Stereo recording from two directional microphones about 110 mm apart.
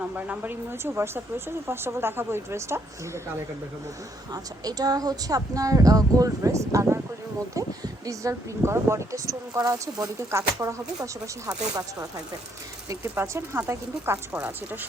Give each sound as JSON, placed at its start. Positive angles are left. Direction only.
{"t": 0.0, "sound": "speech", "side_deg": -15}
{"t": 4.3, "sound": "speech", "side_deg": -35}
{"t": 12.9, "sound": "speech", "side_deg": -25}